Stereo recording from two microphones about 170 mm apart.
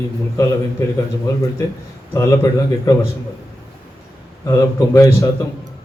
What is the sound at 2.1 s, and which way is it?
Speech, 15° left (ahead or behind).